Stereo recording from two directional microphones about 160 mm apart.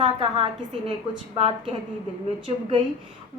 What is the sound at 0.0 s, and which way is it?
A woman's voice, 35° right (ahead or behind).